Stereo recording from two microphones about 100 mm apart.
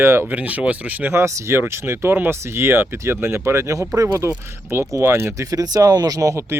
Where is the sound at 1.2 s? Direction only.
30° right (ahead or behind).